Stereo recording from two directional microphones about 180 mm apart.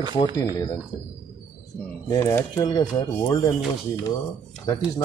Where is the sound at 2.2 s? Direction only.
15° left (ahead or behind).